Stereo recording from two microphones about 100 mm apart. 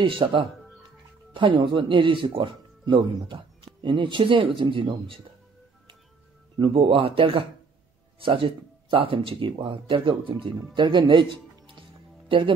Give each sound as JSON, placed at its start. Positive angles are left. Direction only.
{"t": 0.0, "sound": "speech", "side_deg": -55}
{"t": 6.6, "sound": "speech", "side_deg": -65}
{"t": 12.3, "sound": "speech", "side_deg": -55}